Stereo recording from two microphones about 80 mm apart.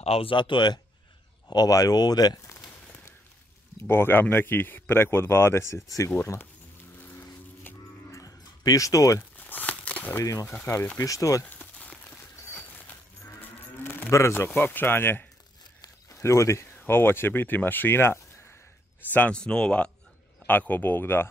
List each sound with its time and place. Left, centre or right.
0.3 s speech: left
1.5 s speech: left
3.8 s speech: left
6.0 s speech: left
7.7 s music: left
8.1 s a sound: left
9.4 s crumpling: left
9.8 s a sound: centre
10.6 s speech: left
11.0 s speech: left
11.4 s a sound: centre
13.4 s music: left
15.8 s speech: left
19.1 s speech: centre